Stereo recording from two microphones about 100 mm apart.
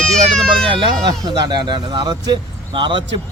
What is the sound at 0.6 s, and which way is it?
Speech, 60° right (ahead or behind).